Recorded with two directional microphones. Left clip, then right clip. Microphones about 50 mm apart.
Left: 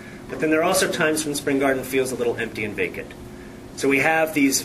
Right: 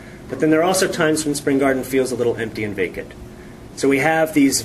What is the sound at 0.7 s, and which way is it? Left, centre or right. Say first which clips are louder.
Speech: right 2 dB; right.